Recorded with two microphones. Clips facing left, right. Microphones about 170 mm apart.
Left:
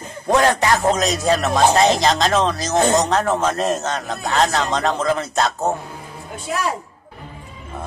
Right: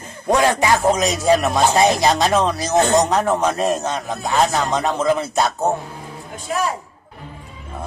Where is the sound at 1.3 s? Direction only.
15° right (ahead or behind).